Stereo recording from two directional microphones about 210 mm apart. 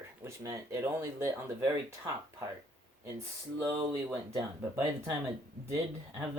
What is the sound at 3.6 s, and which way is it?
Speech, 15° right (ahead or behind).